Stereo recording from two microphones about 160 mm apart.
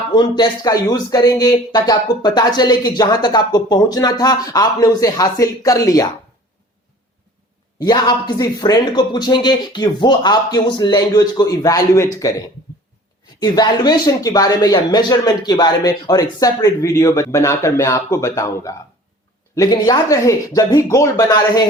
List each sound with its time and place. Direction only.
0.1 s speech: 25° left (ahead or behind)
7.8 s speech: 25° left (ahead or behind)
13.4 s speech: 25° left (ahead or behind)